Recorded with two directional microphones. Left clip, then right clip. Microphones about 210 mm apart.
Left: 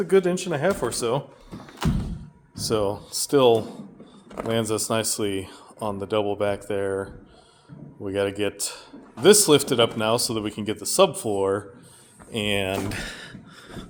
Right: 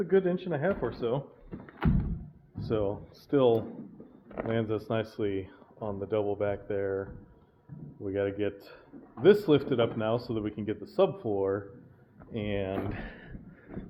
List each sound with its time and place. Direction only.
0.0 s speech: 20° left (ahead or behind)
2.6 s speech: 25° left (ahead or behind)